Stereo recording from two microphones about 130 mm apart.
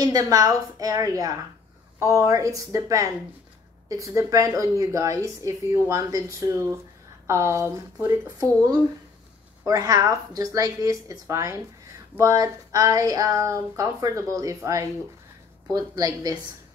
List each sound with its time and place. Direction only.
0.0 s speech: 30° right (ahead or behind)